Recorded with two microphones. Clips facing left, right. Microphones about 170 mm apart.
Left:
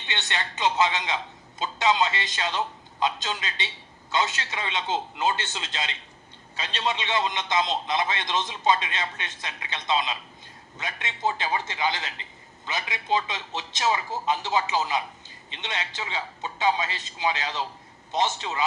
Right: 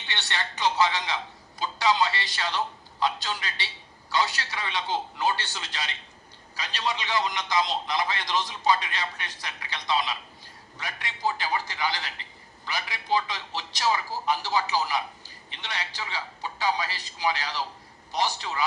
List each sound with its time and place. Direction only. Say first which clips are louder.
0.1 s a man's voice: left 1 dB; 20° left (ahead or behind)